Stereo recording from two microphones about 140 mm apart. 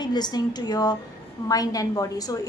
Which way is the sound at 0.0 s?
30° left (ahead or behind).